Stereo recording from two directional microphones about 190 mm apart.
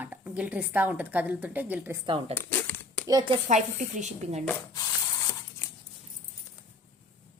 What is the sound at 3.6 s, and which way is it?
Speech, 40° right (ahead or behind).